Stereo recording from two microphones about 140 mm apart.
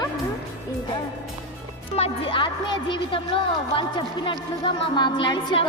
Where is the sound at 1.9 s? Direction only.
40° left (ahead or behind).